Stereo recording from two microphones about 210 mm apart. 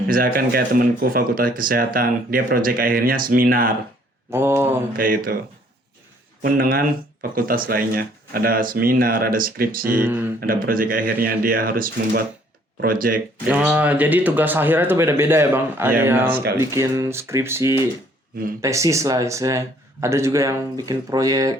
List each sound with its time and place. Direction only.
0.1 s speech: 45° right (ahead or behind)
4.3 s speech: 10° right (ahead or behind)
4.9 s speech: 40° right (ahead or behind)
6.4 s speech: 45° right (ahead or behind)
10.0 s speech: 10° right (ahead or behind)
10.4 s speech: 40° right (ahead or behind)
13.5 s speech: 5° right (ahead or behind)